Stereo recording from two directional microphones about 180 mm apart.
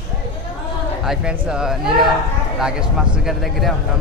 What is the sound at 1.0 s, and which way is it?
Speech, 5° right (ahead or behind).